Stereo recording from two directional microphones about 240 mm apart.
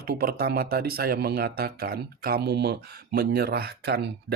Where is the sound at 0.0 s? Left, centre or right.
Right.